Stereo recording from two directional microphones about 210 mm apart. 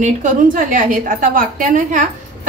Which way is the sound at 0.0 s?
40° right (ahead or behind).